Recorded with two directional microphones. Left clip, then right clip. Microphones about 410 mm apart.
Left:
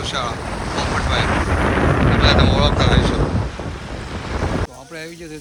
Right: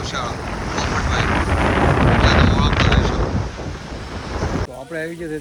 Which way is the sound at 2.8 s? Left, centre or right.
Centre.